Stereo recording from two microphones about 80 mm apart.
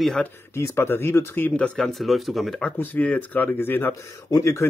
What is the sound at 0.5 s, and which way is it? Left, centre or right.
Speech, left.